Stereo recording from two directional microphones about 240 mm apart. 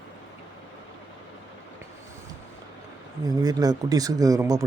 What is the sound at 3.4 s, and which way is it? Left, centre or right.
Speech, centre.